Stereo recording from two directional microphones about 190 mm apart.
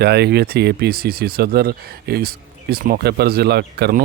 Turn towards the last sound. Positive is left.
turn(degrees=-55)  # may be behind; listen again after turning